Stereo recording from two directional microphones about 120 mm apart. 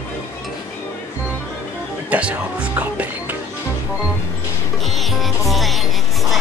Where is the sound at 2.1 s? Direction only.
10° right (ahead or behind).